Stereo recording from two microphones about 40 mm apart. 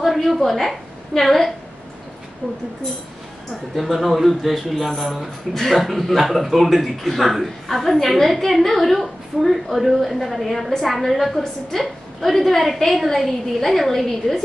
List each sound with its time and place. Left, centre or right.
0.0 s a woman's voice: centre
2.4 s speech: left
3.7 s a man's voice: centre